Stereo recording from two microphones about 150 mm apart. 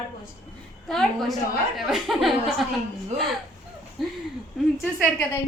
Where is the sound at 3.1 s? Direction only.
Centre (ahead or behind).